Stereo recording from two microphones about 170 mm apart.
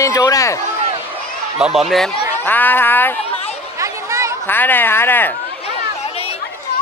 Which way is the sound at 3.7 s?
15° right (ahead or behind).